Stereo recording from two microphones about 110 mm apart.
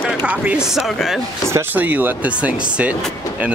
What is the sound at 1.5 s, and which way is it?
Speech, 20° right (ahead or behind).